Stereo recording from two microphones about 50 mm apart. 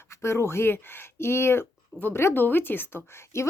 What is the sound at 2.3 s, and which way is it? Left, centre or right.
Speech, left.